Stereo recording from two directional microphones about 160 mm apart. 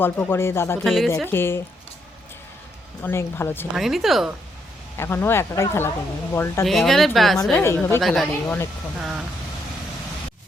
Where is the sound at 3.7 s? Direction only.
Centre (ahead or behind).